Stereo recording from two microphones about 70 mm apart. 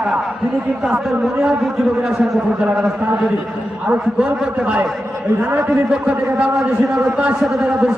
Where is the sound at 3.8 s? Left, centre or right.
Centre.